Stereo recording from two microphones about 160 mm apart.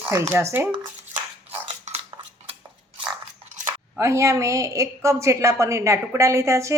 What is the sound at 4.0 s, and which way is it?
A woman's voice, 15° right (ahead or behind).